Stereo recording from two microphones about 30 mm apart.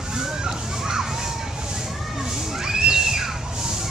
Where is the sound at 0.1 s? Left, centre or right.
Right.